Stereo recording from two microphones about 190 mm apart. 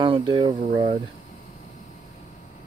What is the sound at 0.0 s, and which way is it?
Speech, 25° right (ahead or behind).